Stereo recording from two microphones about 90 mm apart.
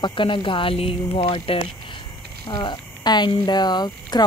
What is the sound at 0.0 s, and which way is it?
Speech, 65° left (ahead or behind).